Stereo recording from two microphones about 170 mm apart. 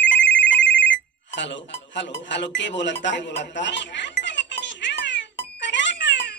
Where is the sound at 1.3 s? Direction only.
90° left.